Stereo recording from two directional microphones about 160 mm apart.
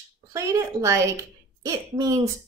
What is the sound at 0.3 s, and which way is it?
Speech, 20° right (ahead or behind).